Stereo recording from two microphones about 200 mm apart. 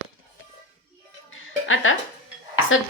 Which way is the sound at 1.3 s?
80° left.